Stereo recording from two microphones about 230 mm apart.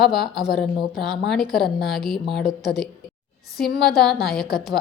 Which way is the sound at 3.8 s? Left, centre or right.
Left.